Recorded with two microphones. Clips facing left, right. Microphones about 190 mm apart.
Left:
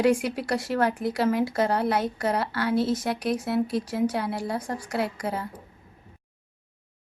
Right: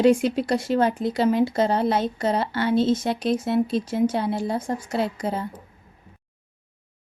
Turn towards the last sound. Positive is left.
turn(degrees=-25)  # may be behind; listen again after turning